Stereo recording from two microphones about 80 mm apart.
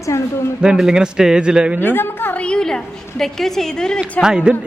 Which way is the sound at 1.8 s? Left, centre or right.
Left.